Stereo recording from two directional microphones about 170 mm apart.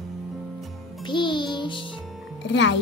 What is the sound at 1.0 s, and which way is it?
Music, 30° left (ahead or behind).